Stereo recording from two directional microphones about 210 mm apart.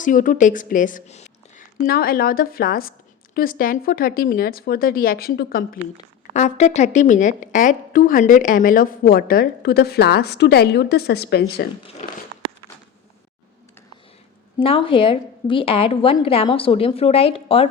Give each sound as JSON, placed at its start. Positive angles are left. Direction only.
{"t": 0.0, "sound": "a woman's voice", "side_deg": 40}
{"t": 6.3, "sound": "a woman's voice", "side_deg": 35}
{"t": 14.6, "sound": "a woman's voice", "side_deg": 25}